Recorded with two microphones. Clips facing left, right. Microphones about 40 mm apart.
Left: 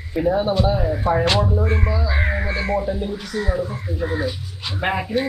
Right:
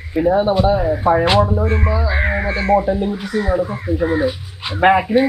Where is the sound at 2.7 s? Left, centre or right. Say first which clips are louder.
Right 6 dB; centre.